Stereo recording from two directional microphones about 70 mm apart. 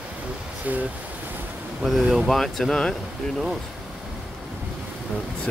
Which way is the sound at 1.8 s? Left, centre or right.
Centre.